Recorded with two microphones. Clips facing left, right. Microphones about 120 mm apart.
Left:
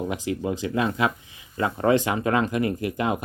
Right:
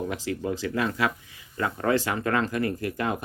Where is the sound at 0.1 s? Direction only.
20° left (ahead or behind).